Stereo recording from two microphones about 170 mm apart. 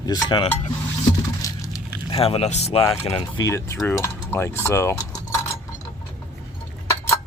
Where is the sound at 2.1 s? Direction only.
35° left (ahead or behind).